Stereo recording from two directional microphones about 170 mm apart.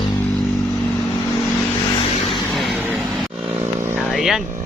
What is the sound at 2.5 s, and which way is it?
Vehicle, centre (ahead or behind).